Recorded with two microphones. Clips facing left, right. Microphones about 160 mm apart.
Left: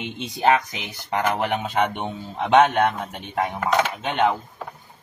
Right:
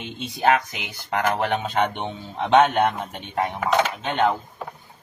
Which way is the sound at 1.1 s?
15° left (ahead or behind).